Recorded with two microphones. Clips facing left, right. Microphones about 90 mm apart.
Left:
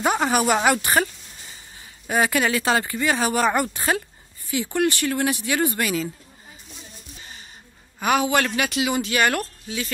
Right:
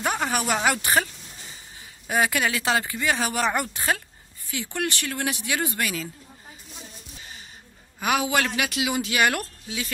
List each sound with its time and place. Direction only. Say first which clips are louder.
0.0 s speech: left 5 dB; 10° left (ahead or behind)
2.0 s speech: left 3 dB; centre (ahead or behind)
8.0 s speech: left 3 dB; 5° right (ahead or behind)